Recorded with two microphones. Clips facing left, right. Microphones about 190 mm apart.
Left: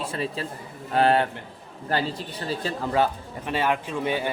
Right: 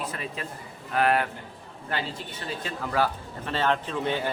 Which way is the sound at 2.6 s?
25° left (ahead or behind).